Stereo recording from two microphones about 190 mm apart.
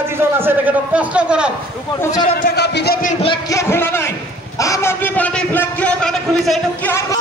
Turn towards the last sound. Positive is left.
turn(degrees=5)  # may be behind; listen again after turning